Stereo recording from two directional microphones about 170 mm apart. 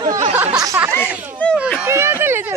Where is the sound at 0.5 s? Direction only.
20° right (ahead or behind).